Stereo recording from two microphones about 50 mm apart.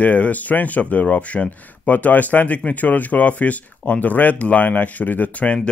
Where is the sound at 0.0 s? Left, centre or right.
Left.